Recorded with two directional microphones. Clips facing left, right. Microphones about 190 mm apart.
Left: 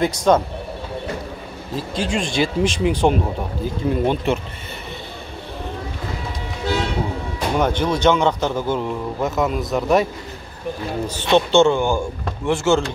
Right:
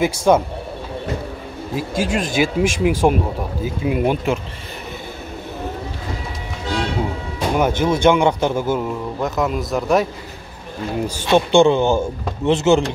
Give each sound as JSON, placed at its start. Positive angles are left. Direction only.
{"t": 0.0, "sound": "speech", "side_deg": -10}
{"t": 1.8, "sound": "speech", "side_deg": -5}
{"t": 7.5, "sound": "speech", "side_deg": -10}
{"t": 11.1, "sound": "speech", "side_deg": -10}